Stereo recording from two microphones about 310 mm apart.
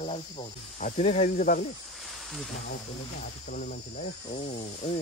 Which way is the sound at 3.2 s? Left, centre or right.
Left.